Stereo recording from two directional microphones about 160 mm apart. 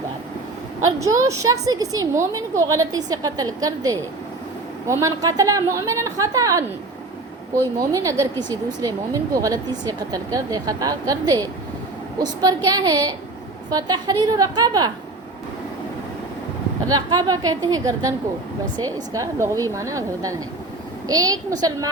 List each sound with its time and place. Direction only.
0.9 s speech: 20° right (ahead or behind)
7.8 s speech: 20° right (ahead or behind)
16.9 s speech: 25° right (ahead or behind)